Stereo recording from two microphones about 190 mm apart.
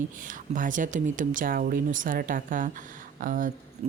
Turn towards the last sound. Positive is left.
turn(degrees=-45)  # may be behind; listen again after turning